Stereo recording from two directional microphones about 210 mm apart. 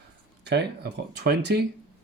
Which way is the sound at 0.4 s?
55° right (ahead or behind).